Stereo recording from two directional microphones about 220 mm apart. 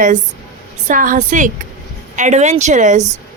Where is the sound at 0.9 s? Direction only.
35° right (ahead or behind).